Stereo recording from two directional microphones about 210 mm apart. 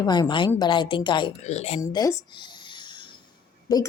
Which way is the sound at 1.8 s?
15° left (ahead or behind).